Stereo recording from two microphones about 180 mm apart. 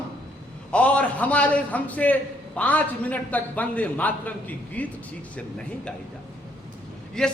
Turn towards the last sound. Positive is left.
turn(degrees=5)  # may be behind; listen again after turning